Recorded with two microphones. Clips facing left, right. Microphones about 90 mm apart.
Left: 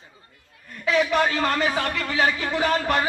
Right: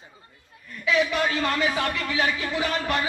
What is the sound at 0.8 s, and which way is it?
Speech, 40° left (ahead or behind).